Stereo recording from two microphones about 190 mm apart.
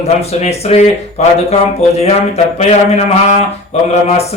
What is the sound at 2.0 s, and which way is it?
Speech, 35° left (ahead or behind).